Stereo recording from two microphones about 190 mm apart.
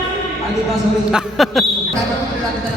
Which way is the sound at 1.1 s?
Centre (ahead or behind).